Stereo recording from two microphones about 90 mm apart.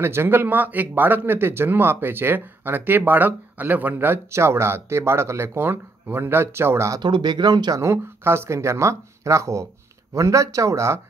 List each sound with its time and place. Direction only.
0.0 s speech: 25° right (ahead or behind)
7.0 s speech: 55° right (ahead or behind)
7.8 s speech: 30° right (ahead or behind)